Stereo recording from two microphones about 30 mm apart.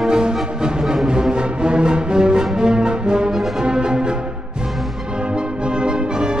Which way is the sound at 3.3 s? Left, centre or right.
Centre.